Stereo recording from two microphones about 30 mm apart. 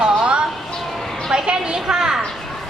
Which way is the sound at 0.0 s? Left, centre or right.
Right.